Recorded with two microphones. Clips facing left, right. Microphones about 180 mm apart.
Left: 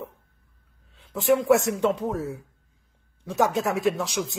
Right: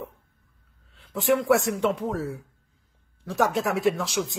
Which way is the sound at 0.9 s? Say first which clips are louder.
Left 1 dB; 20° left (ahead or behind).